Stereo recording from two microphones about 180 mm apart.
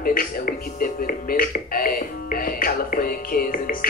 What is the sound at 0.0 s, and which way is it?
Music, 55° left (ahead or behind).